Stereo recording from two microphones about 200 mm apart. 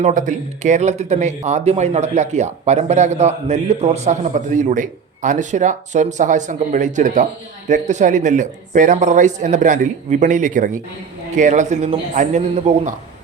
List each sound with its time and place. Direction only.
0.0 s speech: 40° right (ahead or behind)